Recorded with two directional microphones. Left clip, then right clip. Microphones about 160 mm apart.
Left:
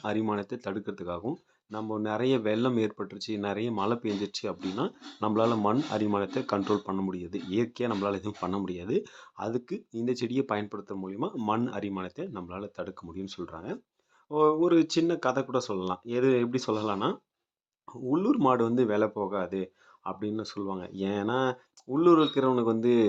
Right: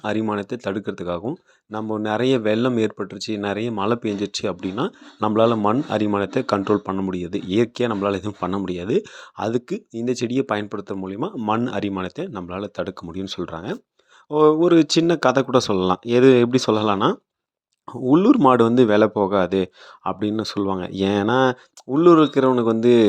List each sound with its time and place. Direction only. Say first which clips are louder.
0.0 s speech: right 7 dB; 25° right (ahead or behind)